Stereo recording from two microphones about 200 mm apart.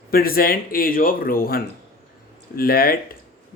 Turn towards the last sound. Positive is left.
turn(degrees=50)  # may be behind; listen again after turning